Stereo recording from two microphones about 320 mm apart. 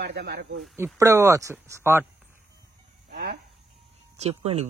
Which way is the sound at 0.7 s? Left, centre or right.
Centre.